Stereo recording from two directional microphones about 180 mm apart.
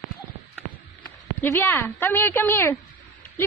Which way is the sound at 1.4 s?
10° left (ahead or behind).